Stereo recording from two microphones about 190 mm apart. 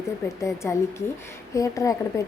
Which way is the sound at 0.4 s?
15° left (ahead or behind).